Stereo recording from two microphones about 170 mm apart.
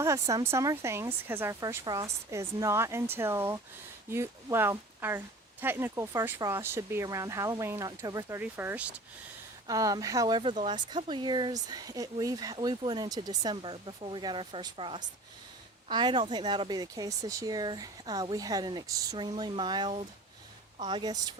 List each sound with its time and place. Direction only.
0.0 s speech: 20° right (ahead or behind)
8.4 s speech: 10° right (ahead or behind)
9.6 s speech: 20° right (ahead or behind)